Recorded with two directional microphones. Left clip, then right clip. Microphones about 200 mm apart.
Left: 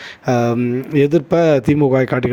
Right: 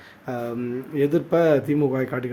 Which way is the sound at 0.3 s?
40° left (ahead or behind).